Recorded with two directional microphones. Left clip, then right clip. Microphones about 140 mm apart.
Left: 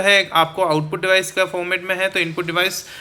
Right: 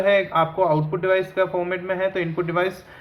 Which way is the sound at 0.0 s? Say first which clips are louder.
Left 4 dB; 25° left (ahead or behind).